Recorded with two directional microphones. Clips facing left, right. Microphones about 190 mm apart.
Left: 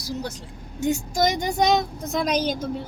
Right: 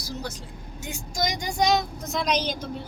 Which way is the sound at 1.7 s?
50° left (ahead or behind).